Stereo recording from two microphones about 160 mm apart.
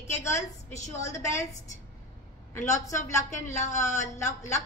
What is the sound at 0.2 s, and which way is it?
Speech, 15° left (ahead or behind).